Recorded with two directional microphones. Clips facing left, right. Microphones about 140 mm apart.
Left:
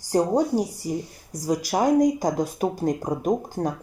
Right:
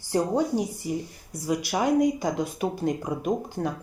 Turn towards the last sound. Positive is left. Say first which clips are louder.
# left 3 dB
turn(degrees=40)  # may be behind; listen again after turning